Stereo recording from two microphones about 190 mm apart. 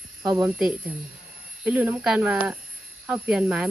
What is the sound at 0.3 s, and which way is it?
Speech, 5° right (ahead or behind).